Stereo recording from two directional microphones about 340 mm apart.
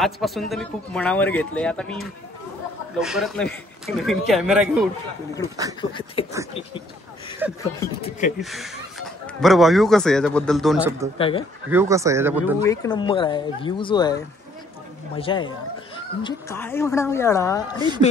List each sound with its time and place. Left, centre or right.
0.0 s speech: centre
5.8 s speech: centre
7.4 s speech: centre
7.8 s speech: centre
8.4 s speech: centre
11.1 s speech: centre
11.7 s speech: centre
12.6 s speech: centre
17.7 s speech: centre